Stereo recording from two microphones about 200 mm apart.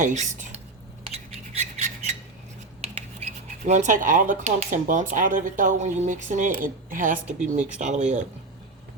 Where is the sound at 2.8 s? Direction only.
35° right (ahead or behind).